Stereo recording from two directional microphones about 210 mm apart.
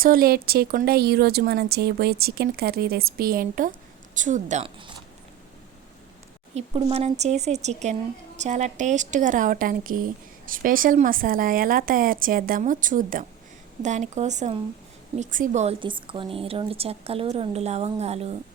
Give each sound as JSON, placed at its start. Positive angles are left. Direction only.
{"t": 0.0, "sound": "speech", "side_deg": -45}
{"t": 6.5, "sound": "a woman's voice", "side_deg": -30}